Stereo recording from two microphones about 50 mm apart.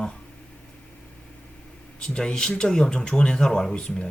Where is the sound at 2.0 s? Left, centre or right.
Centre.